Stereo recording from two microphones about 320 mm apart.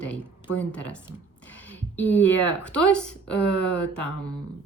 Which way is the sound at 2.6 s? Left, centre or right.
Centre.